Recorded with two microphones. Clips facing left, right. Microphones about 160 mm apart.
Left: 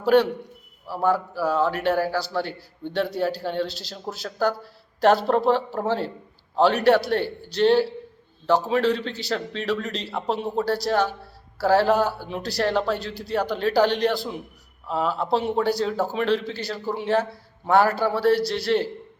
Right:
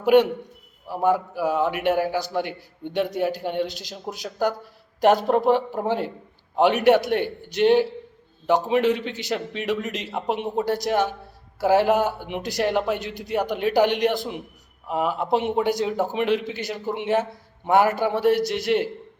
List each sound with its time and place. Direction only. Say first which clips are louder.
0.0 s a man's voice: right 2 dB; 15° right (ahead or behind)